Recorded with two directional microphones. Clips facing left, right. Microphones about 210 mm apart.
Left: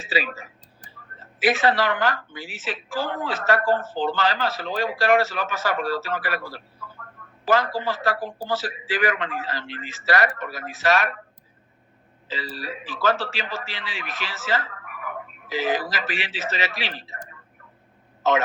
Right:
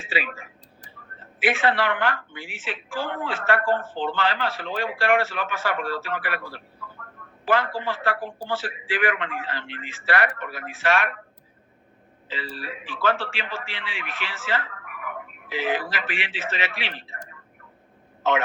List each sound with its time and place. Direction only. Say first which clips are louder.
0.1 s speech: left 3 dB; 40° left (ahead or behind)
12.3 s speech: left 2 dB; 40° left (ahead or behind)
18.2 s a man's voice: left 2 dB; 40° left (ahead or behind)